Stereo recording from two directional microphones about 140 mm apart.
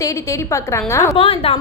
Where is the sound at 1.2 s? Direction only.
45° left (ahead or behind).